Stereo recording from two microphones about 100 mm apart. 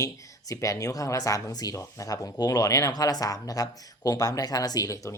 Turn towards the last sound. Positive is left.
turn(degrees=35)  # may be behind; listen again after turning